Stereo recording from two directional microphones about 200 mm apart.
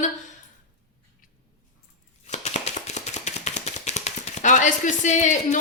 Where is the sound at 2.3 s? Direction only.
35° left (ahead or behind).